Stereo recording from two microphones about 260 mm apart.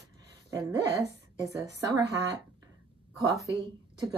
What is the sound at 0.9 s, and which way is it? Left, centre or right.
Speech, centre.